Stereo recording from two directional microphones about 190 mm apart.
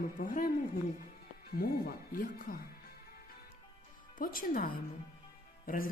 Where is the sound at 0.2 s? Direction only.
50° left (ahead or behind).